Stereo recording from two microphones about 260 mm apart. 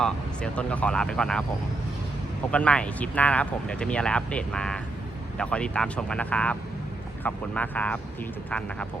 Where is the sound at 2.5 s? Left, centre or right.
Centre.